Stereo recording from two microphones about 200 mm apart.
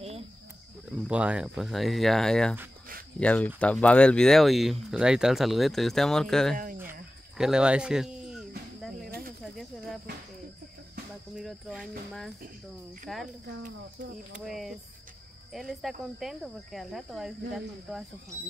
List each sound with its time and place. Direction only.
1.0 s speech: 5° right (ahead or behind)
6.5 s cricket: 45° right (ahead or behind)
6.9 s music: 5° right (ahead or behind)
9.0 s cricket: 50° right (ahead or behind)
9.4 s snake: centre (ahead or behind)
11.3 s speech: centre (ahead or behind)
13.0 s speech: centre (ahead or behind)
13.5 s speech: 40° right (ahead or behind)
14.4 s speech: centre (ahead or behind)